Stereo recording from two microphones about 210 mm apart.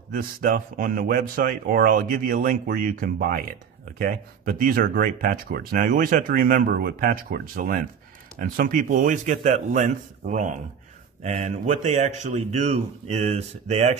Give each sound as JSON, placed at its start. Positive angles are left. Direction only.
{"t": 0.1, "sound": "speech", "side_deg": -40}